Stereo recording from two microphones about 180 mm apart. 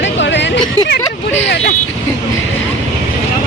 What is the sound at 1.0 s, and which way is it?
Speech, 10° left (ahead or behind).